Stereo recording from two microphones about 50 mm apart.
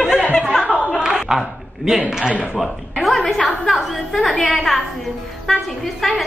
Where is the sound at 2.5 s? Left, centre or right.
Centre.